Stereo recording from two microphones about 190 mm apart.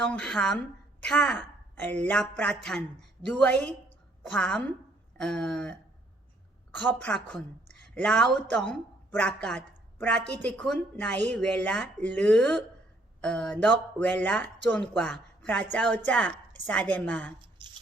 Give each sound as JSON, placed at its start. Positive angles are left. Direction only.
{"t": 0.1, "sound": "a woman's voice", "side_deg": 5}
{"t": 17.6, "sound": "beatboxing", "side_deg": -25}